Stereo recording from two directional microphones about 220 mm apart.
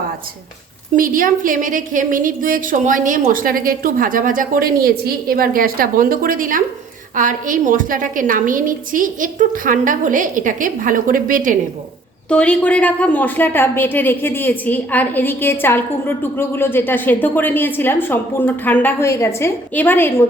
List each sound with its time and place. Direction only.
0.9 s a woman's voice: 40° right (ahead or behind)
12.3 s a woman's voice: 5° left (ahead or behind)